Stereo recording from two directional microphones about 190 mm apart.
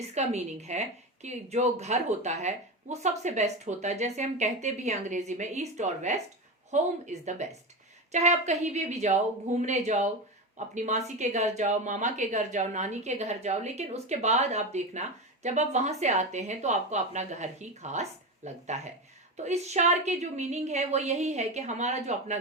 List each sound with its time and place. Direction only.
0.1 s a woman's voice: 35° right (ahead or behind)